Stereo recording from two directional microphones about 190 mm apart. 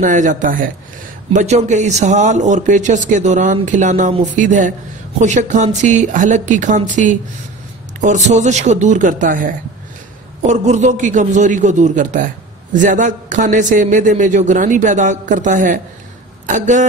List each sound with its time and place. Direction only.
0.0 s a man's voice: 40° right (ahead or behind)